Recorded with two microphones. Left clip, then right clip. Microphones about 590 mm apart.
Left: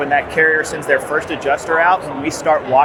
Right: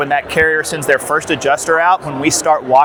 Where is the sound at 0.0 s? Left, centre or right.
Right.